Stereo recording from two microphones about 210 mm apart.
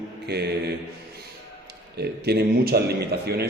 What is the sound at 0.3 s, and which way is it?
Speech, 50° right (ahead or behind).